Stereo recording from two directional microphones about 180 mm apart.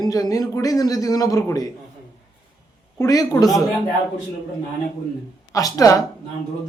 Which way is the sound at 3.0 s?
20° left (ahead or behind).